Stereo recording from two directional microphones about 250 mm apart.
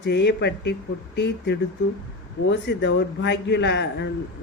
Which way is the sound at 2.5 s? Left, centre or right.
Left.